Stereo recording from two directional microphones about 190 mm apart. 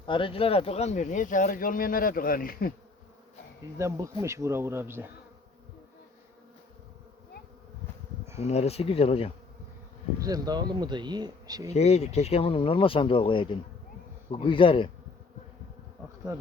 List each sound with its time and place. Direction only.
0.0 s speech: 25° left (ahead or behind); by 2.7 s 50° left (ahead or behind)
3.8 s speech: 15° right (ahead or behind)
8.4 s speech: 35° left (ahead or behind)
10.2 s speech: 20° right (ahead or behind)
11.7 s speech: 35° left (ahead or behind)